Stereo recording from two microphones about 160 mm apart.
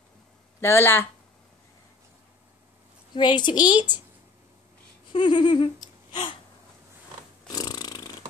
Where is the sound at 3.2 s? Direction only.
30° left (ahead or behind).